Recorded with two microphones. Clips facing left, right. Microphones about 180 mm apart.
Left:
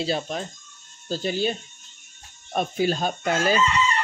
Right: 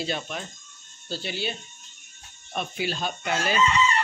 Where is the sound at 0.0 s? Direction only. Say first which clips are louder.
Left 4 dB; 35° left (ahead or behind).